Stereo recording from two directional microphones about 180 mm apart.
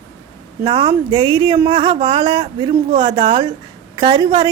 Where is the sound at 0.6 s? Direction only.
25° right (ahead or behind).